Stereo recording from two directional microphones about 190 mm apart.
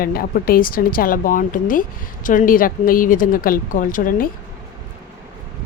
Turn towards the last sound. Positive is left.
turn(degrees=45)  # may be behind; listen again after turning